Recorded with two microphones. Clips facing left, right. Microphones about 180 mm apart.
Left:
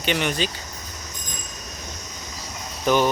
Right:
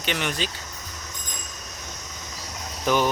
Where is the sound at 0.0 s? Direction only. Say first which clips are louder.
Left 4 dB; centre (ahead or behind).